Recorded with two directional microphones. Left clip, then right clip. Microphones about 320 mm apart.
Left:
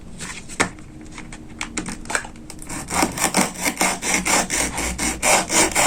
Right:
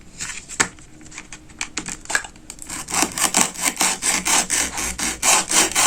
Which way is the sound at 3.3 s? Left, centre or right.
Centre.